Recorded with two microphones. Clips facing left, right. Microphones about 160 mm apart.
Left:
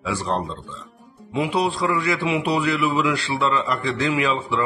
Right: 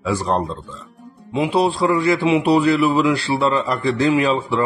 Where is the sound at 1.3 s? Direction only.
30° right (ahead or behind).